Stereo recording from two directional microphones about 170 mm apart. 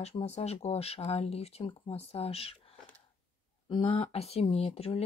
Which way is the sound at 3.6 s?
30° left (ahead or behind).